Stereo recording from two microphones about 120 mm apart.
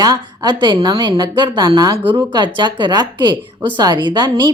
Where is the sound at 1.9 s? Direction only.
45° right (ahead or behind).